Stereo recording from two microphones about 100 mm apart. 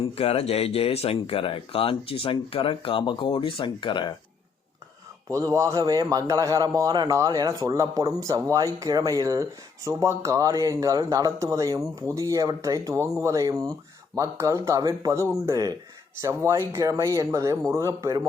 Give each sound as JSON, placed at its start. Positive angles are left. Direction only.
{"t": 0.1, "sound": "speech", "side_deg": 90}
{"t": 5.3, "sound": "a man's voice", "side_deg": -30}